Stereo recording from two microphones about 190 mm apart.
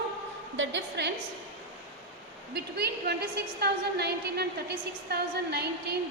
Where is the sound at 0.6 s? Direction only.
75° right (ahead or behind).